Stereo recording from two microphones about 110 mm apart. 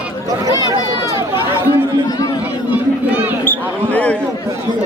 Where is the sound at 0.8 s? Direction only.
45° left (ahead or behind).